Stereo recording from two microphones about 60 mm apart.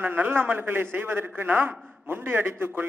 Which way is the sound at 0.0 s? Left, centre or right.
Right.